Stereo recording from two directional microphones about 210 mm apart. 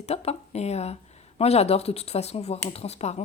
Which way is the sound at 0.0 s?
30° left (ahead or behind).